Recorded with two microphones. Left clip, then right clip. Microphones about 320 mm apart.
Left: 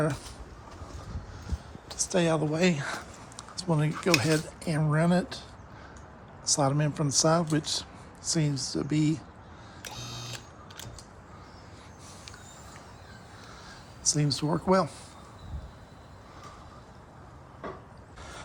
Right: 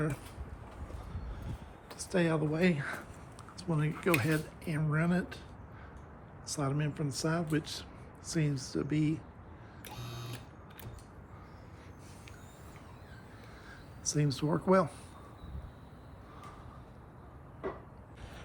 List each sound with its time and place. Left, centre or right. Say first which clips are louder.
1.9 s speech: left 5 dB; centre
6.4 s speech: left 10 dB; centre
10.0 s a sound: left 6 dB; left
14.0 s speech: left 6 dB; centre